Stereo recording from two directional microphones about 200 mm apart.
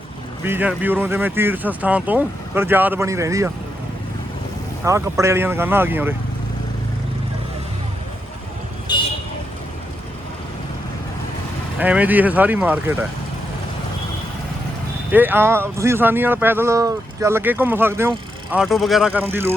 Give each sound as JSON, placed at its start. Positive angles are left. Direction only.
{"t": 0.4, "sound": "speech", "side_deg": -10}
{"t": 4.9, "sound": "speech", "side_deg": -15}
{"t": 11.8, "sound": "speech", "side_deg": -10}
{"t": 15.1, "sound": "speech", "side_deg": -10}